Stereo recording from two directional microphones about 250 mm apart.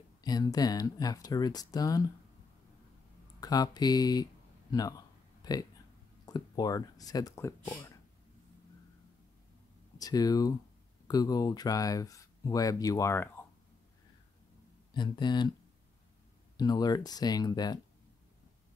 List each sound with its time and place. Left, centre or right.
0.2 s speech: centre
3.3 s speech: centre
9.9 s speech: centre
15.0 s speech: centre
16.5 s speech: centre